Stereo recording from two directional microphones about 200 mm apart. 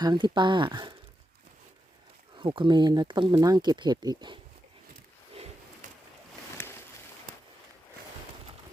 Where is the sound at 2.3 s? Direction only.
25° right (ahead or behind).